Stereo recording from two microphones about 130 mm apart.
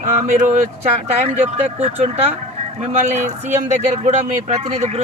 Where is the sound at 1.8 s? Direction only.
50° right (ahead or behind).